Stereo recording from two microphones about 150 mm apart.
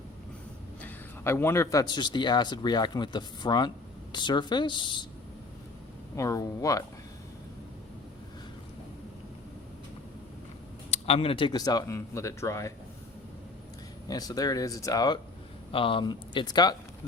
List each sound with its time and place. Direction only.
0.8 s a man's voice: 15° left (ahead or behind); by 5.0 s 30° left (ahead or behind)
6.1 s a man's voice: 20° left (ahead or behind)
10.9 s a man's voice: 45° left (ahead or behind); by 12.7 s 20° left (ahead or behind)
14.1 s a man's voice: 25° left (ahead or behind)